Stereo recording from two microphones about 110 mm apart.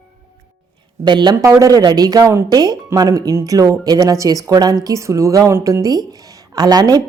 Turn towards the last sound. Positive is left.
turn(degrees=-35)  # may be behind; listen again after turning